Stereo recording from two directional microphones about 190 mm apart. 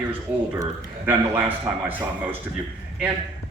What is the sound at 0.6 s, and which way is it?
A man's voice, 15° right (ahead or behind).